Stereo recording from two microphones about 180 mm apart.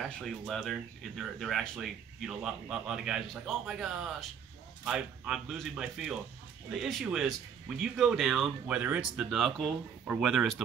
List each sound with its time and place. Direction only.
0.0 s speech: centre (ahead or behind)